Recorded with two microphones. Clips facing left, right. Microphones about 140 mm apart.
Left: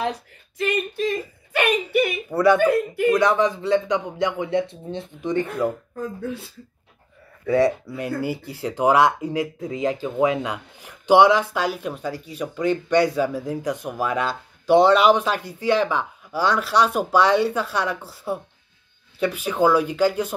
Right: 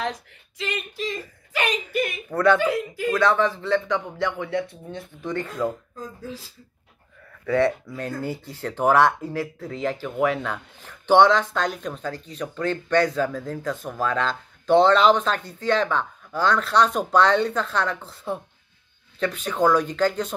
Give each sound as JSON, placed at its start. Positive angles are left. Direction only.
{"t": 0.6, "sound": "speech", "side_deg": 55}
{"t": 2.2, "sound": "speech", "side_deg": 10}
{"t": 2.6, "sound": "speech", "side_deg": 60}
{"t": 3.1, "sound": "speech", "side_deg": 15}
{"t": 5.9, "sound": "speech", "side_deg": 65}
{"t": 7.5, "sound": "speech", "side_deg": 15}